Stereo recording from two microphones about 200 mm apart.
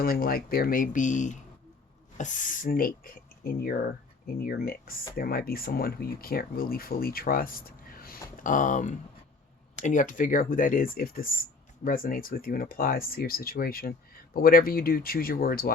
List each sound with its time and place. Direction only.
0.0 s speech: 45° left (ahead or behind)